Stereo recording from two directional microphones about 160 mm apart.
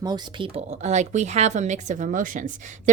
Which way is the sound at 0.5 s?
45° right (ahead or behind).